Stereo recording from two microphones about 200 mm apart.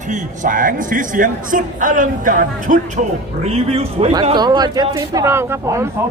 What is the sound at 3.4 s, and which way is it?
A man's voice, 30° right (ahead or behind).